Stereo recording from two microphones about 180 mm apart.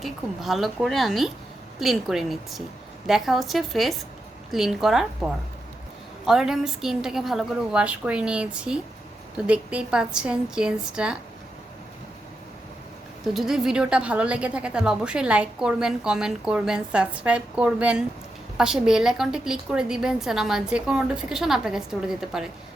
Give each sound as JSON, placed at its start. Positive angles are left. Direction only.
{"t": 0.0, "sound": "speech", "side_deg": 0}
{"t": 13.2, "sound": "speech", "side_deg": 0}